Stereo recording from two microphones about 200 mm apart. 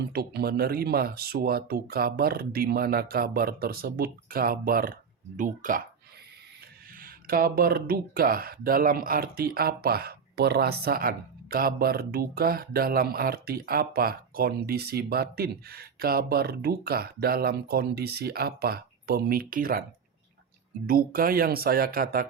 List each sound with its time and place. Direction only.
0.1 s speech: 50° right (ahead or behind)
7.0 s speech: 45° right (ahead or behind)
20.8 s speech: 45° right (ahead or behind)